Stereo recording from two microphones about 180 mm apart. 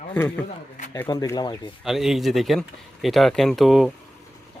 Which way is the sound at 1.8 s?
Centre (ahead or behind).